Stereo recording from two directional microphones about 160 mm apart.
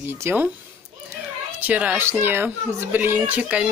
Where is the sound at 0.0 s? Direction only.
15° right (ahead or behind).